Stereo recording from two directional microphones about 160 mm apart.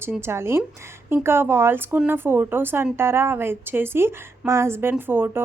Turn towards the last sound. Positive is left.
turn(degrees=-15)  # may be behind; listen again after turning